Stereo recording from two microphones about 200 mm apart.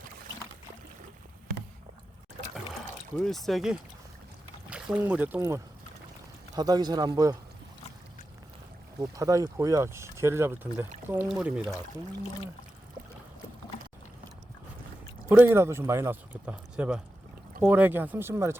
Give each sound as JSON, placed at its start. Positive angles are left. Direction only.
{"t": 3.2, "sound": "speech", "side_deg": 0}
{"t": 9.0, "sound": "speech", "side_deg": -15}
{"t": 15.3, "sound": "speech", "side_deg": -10}